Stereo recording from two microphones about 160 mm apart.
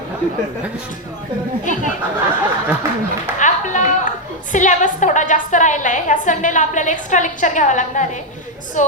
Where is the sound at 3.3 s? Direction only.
50° left (ahead or behind).